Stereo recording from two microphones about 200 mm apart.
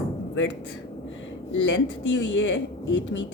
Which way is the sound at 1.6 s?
65° left (ahead or behind).